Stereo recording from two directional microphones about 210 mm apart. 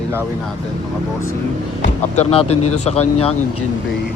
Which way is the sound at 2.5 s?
90° left.